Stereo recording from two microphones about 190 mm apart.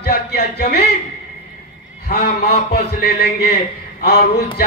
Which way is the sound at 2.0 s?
55° left (ahead or behind).